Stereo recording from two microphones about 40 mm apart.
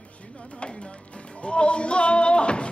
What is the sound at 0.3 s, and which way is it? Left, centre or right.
Music, left.